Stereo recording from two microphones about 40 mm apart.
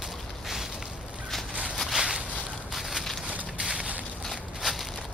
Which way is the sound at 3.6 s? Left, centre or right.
Centre.